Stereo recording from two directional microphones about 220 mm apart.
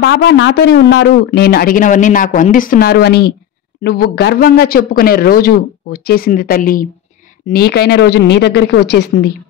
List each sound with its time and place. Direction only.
0.0 s speech: 55° left (ahead or behind)